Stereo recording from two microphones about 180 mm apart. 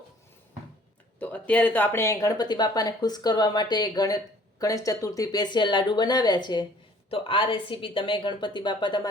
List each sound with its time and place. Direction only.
1.2 s speech: 5° left (ahead or behind); by 9.0 s 25° left (ahead or behind)